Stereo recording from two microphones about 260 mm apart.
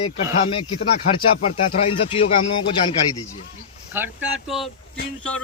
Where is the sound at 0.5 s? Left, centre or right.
Left.